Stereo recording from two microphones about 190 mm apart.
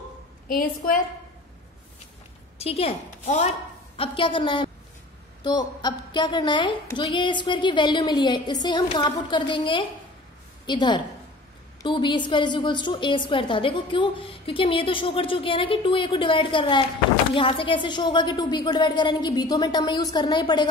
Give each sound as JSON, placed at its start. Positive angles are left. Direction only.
{"t": 0.5, "sound": "a woman's voice", "side_deg": 45}
{"t": 2.6, "sound": "a woman's voice", "side_deg": 30}